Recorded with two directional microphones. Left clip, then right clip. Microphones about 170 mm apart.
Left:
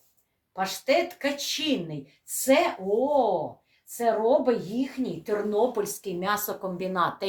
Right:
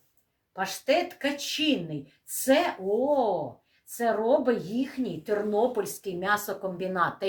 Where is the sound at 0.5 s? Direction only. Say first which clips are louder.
Left 1 dB; 10° left (ahead or behind).